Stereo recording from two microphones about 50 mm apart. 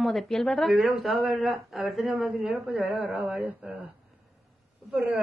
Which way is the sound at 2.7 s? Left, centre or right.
Right.